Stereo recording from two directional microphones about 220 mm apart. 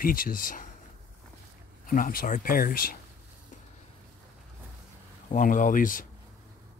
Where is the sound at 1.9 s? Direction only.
40° left (ahead or behind).